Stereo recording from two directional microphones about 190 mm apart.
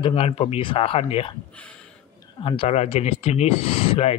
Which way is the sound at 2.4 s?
30° left (ahead or behind).